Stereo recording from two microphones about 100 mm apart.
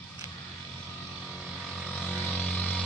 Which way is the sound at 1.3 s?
5° left (ahead or behind).